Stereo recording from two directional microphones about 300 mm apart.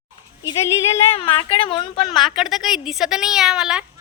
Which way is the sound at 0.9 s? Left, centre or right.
Centre.